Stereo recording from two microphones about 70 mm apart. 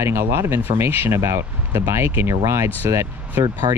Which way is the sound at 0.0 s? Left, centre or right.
Right.